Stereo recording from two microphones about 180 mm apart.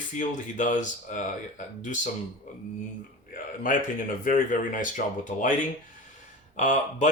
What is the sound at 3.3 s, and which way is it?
Speech, 50° left (ahead or behind).